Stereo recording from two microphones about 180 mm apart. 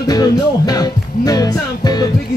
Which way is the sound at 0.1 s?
20° left (ahead or behind).